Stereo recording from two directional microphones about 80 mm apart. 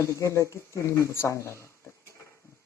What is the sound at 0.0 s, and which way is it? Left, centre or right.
Speech, left.